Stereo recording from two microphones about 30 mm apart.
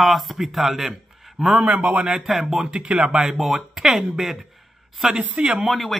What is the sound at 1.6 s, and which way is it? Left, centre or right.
Speech, right.